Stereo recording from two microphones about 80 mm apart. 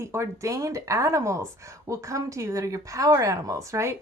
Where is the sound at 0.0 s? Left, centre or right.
Right.